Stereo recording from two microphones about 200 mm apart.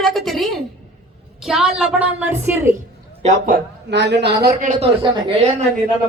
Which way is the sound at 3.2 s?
40° right (ahead or behind).